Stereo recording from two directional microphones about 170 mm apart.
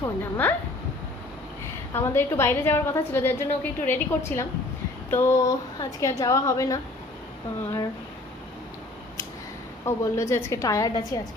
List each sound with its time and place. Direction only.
0.0 s a woman's voice: 10° left (ahead or behind)
1.9 s a woman's voice: 15° left (ahead or behind)
9.8 s a woman's voice: 15° left (ahead or behind)